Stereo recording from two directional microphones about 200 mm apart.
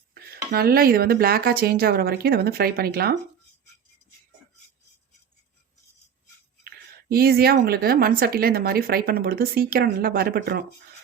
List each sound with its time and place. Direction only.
0.1 s a woman's voice: 50° right (ahead or behind)
6.7 s a woman's voice: 50° right (ahead or behind)